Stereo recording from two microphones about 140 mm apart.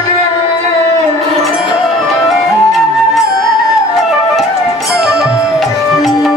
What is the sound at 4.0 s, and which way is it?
Flute, centre (ahead or behind).